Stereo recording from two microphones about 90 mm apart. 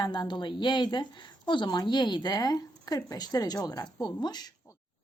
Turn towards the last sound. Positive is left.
turn(degrees=50)  # may be behind; listen again after turning